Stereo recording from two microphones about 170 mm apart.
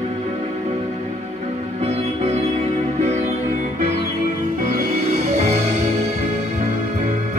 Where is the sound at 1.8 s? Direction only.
40° right (ahead or behind).